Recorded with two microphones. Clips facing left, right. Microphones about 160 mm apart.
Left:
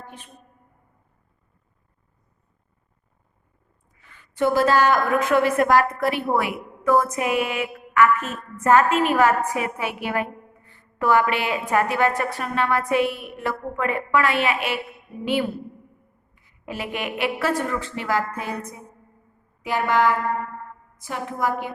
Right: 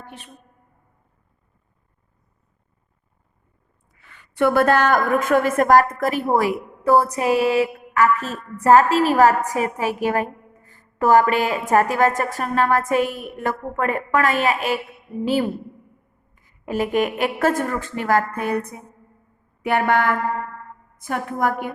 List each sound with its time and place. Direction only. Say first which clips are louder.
3.9 s a woman's voice: right 4 dB; 80° right; by 18.8 s 60° right (ahead or behind)
19.6 s a sound: right 1 dB; 60° right (ahead or behind)
20.9 s a woman's voice: right 5 dB; 55° right (ahead or behind)